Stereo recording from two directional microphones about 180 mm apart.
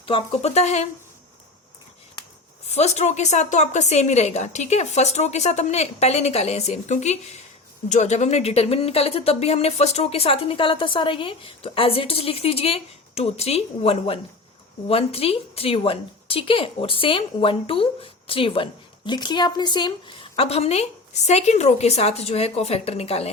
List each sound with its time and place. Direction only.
0.0 s a woman's voice: 30° left (ahead or behind)
2.6 s a woman's voice: 40° left (ahead or behind)